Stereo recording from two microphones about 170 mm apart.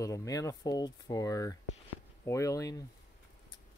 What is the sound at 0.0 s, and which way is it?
Speech, 20° left (ahead or behind).